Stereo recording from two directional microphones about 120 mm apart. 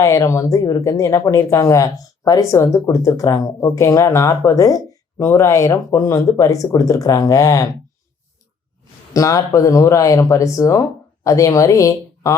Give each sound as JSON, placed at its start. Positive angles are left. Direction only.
{"t": 0.0, "sound": "speech", "side_deg": 25}
{"t": 9.1, "sound": "speech", "side_deg": 30}